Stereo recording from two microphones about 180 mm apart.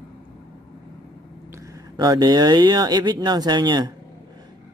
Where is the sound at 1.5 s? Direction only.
15° right (ahead or behind).